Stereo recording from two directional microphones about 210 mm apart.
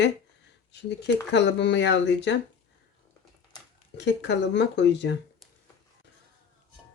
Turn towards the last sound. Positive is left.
turn(degrees=55)  # may be behind; listen again after turning